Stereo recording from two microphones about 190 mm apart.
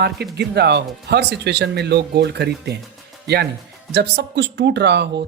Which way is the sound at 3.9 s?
65° right (ahead or behind).